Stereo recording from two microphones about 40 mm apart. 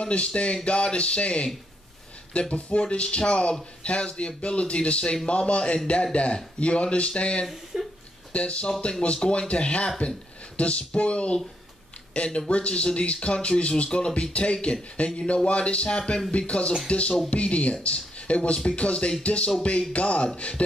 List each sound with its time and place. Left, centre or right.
0.0 s speech: left
7.7 s a sound: centre
8.3 s speech: left